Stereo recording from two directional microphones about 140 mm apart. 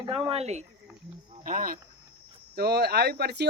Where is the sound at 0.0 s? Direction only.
40° right (ahead or behind).